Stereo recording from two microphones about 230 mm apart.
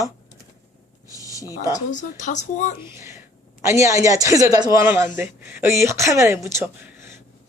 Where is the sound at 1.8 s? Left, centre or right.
Left.